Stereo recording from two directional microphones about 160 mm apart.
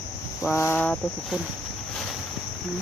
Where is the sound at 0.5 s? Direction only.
15° left (ahead or behind).